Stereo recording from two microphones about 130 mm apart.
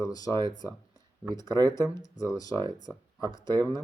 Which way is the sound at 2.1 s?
25° left (ahead or behind).